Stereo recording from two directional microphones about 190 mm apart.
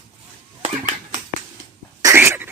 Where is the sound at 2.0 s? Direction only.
10° right (ahead or behind).